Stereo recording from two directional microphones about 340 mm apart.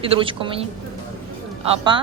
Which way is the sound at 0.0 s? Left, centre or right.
Centre.